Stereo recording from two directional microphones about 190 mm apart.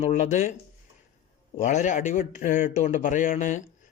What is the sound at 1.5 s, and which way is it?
Speech, 40° left (ahead or behind).